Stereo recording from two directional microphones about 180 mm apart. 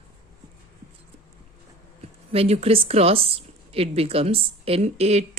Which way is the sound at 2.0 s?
35° right (ahead or behind).